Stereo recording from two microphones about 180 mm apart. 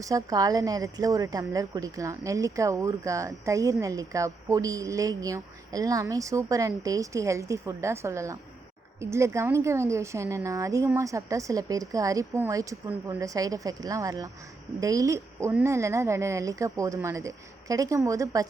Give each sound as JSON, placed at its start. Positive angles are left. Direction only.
{"t": 0.0, "sound": "a woman's voice", "side_deg": -20}